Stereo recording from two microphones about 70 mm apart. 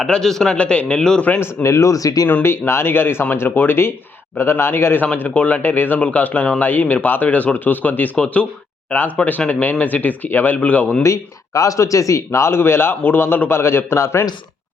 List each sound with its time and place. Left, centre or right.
0.0 s a man's voice: centre
1.4 s speech: left
2.3 s a man's voice: left
11.0 s a man's voice: left